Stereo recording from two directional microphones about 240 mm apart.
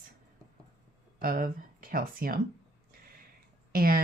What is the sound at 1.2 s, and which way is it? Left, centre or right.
Speech, right.